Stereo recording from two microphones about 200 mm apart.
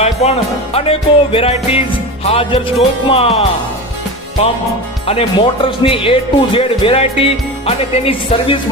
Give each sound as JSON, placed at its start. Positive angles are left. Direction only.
{"t": 0.0, "sound": "speech", "side_deg": 35}
{"t": 5.0, "sound": "speech", "side_deg": 30}